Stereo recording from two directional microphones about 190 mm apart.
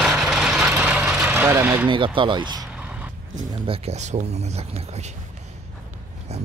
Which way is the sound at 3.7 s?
35° right (ahead or behind).